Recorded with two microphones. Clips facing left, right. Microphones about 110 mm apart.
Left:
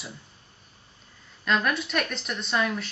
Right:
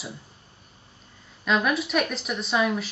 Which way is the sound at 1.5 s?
5° right (ahead or behind).